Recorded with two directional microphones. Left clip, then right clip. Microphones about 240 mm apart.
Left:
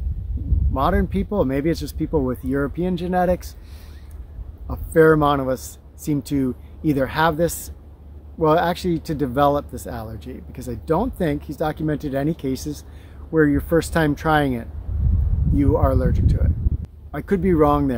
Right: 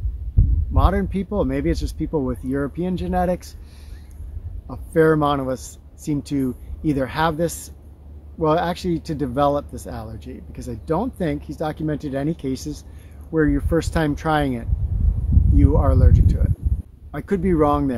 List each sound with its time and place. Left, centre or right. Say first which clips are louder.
0.7 s speech: left 2 dB; centre
4.6 s speech: left 2 dB; centre